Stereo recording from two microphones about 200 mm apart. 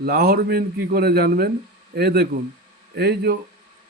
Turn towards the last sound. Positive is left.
turn(degrees=-55)  # may be behind; listen again after turning